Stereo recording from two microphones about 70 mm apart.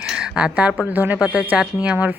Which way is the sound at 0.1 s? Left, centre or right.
Centre.